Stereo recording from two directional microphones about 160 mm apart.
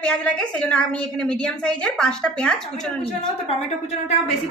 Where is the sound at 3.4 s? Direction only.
40° left (ahead or behind).